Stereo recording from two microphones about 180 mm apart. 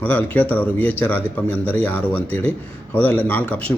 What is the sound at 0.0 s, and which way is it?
A man's voice, 10° left (ahead or behind).